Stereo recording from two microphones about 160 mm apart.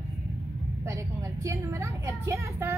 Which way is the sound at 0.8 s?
20° right (ahead or behind).